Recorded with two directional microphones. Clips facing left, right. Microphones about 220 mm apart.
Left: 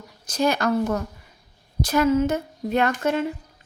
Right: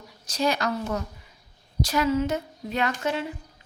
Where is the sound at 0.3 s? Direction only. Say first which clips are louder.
Left 4 dB; 50° left (ahead or behind).